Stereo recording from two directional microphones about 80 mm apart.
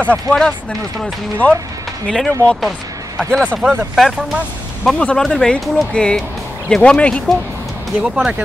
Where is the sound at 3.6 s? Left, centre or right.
Right.